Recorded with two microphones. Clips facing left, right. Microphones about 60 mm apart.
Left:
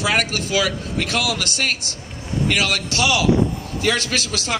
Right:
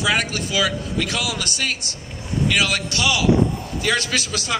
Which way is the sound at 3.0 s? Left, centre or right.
Left.